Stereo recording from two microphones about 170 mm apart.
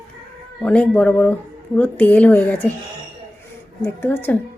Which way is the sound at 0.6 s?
5° left (ahead or behind).